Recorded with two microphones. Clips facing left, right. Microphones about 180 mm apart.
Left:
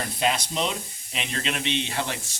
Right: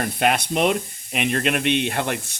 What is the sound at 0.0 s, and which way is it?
Speech, 60° right (ahead or behind).